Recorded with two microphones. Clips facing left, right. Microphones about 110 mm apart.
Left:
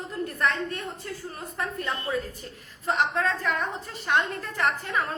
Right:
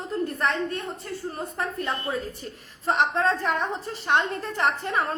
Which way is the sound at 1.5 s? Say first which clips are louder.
Even; 30° right (ahead or behind).